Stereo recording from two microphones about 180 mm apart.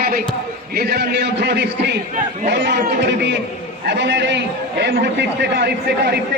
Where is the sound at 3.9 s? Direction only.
75° right (ahead or behind).